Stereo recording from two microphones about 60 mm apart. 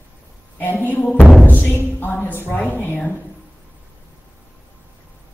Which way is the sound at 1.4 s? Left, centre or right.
Left.